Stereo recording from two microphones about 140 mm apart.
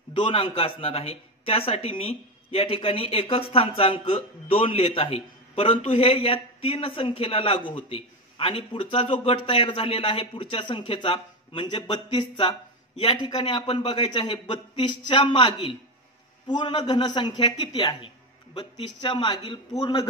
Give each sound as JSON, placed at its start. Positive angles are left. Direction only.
{"t": 0.1, "sound": "a man's voice", "side_deg": 40}